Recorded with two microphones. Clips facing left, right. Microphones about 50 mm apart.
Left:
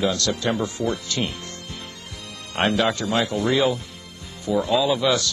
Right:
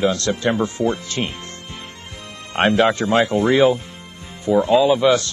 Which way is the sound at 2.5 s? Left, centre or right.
Right.